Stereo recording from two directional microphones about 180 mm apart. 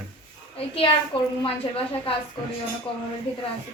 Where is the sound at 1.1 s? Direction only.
30° left (ahead or behind).